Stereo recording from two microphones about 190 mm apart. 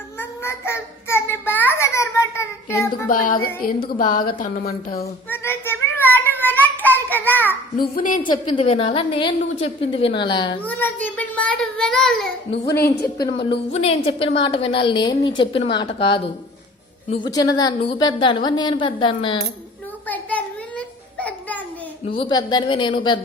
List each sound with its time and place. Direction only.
0.2 s child singing: 15° left (ahead or behind)
3.1 s speech: 45° left (ahead or behind)
5.3 s child singing: 10° left (ahead or behind)
6.4 s a sound: 10° left (ahead or behind)
7.8 s speech: 45° left (ahead or behind)
8.2 s a woman's voice: 25° left (ahead or behind)
10.6 s a child's voice: 10° left (ahead or behind)
12.8 s a woman's voice: 55° left (ahead or behind)
13.2 s a woman's voice: 25° left (ahead or behind)
20.1 s a sound: 10° left (ahead or behind)
22.2 s a woman's voice: 20° left (ahead or behind)